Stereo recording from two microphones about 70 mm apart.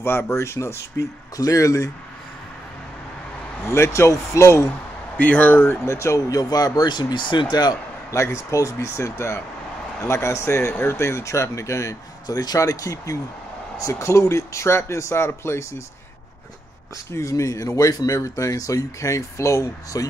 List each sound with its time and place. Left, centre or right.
0.0 s speech: left
3.6 s speech: left
4.6 s speech: left
5.9 s speech: left
8.1 s a man's voice: left
17.1 s speech: left